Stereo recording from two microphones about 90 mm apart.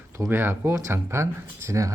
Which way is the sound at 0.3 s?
25° right (ahead or behind).